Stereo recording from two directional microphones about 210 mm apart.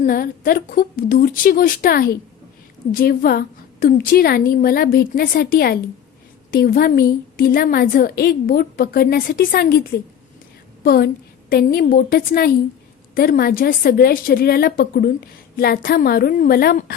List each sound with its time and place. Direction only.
0.0 s a woman's voice: 45° left (ahead or behind)
10.8 s a woman's voice: 45° left (ahead or behind)